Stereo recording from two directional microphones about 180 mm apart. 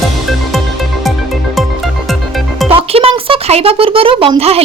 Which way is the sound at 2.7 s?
30° right (ahead or behind).